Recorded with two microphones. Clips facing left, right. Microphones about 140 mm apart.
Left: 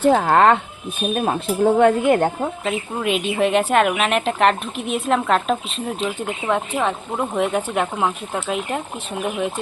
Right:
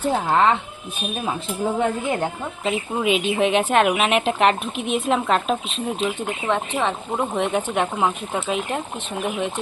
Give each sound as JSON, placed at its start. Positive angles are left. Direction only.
{"t": 0.0, "sound": "speech", "side_deg": 75}
{"t": 2.6, "sound": "speech", "side_deg": 0}